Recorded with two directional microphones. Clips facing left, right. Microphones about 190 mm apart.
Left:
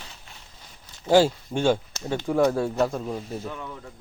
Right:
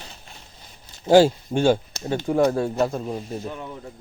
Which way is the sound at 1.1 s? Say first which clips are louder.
Right 4 dB; 15° right (ahead or behind).